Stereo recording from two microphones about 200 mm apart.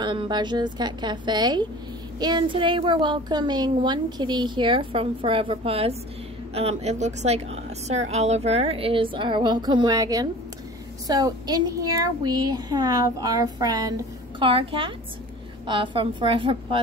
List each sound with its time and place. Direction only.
0.0 s a woman's voice: 25° right (ahead or behind)